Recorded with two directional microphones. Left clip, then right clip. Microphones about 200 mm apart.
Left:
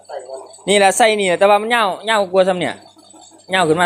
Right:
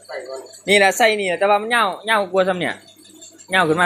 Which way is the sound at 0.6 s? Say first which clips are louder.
Left 2 dB; 20° left (ahead or behind).